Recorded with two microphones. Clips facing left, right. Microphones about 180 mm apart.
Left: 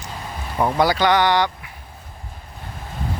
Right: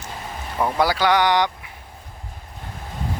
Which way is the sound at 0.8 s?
5° right (ahead or behind).